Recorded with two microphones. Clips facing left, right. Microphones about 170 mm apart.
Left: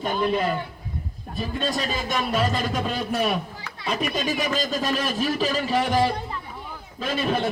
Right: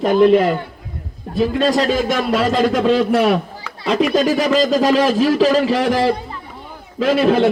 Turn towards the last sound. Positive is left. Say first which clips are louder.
# right 11 dB
turn(degrees=-90)